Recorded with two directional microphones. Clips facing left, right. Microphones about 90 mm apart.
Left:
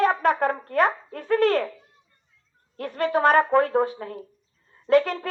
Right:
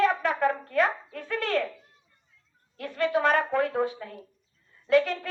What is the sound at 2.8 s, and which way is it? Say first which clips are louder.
Brass instrument: left 3 dB; 40° left (ahead or behind).